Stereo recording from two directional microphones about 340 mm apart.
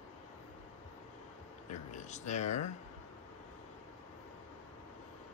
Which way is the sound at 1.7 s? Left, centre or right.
Left.